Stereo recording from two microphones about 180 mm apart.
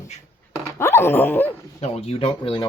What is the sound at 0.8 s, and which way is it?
Speech, 15° left (ahead or behind).